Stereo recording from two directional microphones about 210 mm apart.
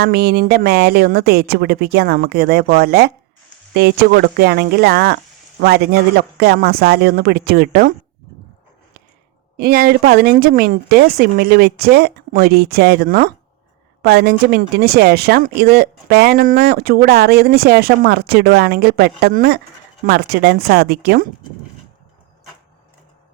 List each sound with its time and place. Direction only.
0.0 s speech: 50° right (ahead or behind)
9.6 s speech: 50° right (ahead or behind)